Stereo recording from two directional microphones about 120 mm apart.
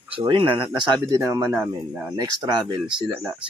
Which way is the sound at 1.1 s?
25° right (ahead or behind).